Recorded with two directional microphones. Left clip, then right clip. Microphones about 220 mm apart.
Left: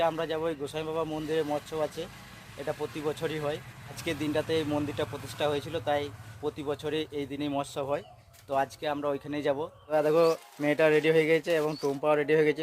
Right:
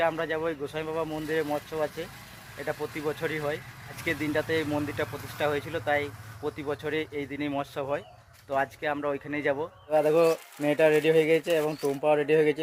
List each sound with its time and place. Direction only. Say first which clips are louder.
0.0 s speech: right 1 dB; 15° left (ahead or behind)
9.9 s speech: right 2 dB; 5° right (ahead or behind)